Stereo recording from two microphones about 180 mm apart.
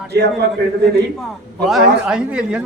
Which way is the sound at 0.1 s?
65° right (ahead or behind).